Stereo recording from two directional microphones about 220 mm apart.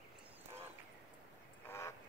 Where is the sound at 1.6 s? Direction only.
10° left (ahead or behind).